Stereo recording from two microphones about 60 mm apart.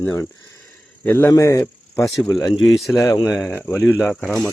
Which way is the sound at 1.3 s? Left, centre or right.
Left.